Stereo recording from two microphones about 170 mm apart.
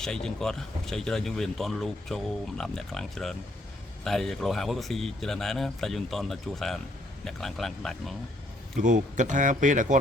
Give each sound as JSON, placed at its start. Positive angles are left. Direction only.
{"t": 0.0, "sound": "speech", "side_deg": 5}
{"t": 8.8, "sound": "speech", "side_deg": -50}